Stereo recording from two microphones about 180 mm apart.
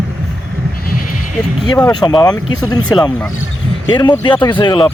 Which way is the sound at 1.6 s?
25° left (ahead or behind).